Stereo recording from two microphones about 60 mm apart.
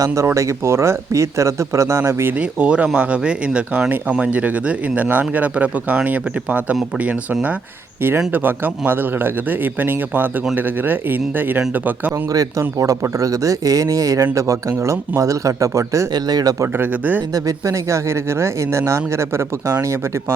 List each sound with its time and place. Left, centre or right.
0.3 s speech: right
2.4 s speech: centre
8.3 s speech: right
12.3 s speech: right
16.7 s speech: right
17.3 s speech: right